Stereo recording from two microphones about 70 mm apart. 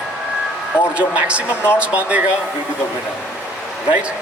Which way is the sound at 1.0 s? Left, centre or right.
Centre.